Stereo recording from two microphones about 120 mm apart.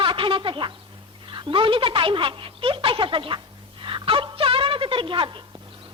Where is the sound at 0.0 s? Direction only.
45° right (ahead or behind).